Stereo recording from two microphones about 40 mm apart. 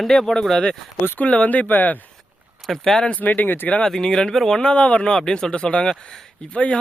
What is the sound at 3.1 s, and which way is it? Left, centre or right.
Speech, left.